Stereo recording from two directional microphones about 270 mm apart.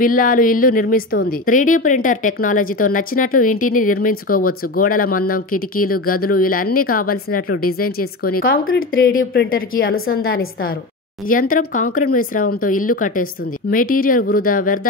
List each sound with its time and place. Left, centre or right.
0.0 s a woman's voice: left
7.4 s speech: left
8.4 s a woman's voice: left